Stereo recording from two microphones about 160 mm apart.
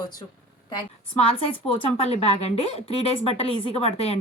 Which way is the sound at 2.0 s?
40° left (ahead or behind).